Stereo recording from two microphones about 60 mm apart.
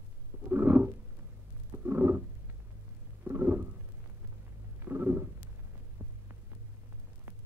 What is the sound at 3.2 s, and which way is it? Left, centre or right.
Stomach rumble, right.